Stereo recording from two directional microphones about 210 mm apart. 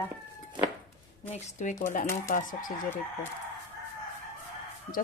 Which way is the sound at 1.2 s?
35° left (ahead or behind).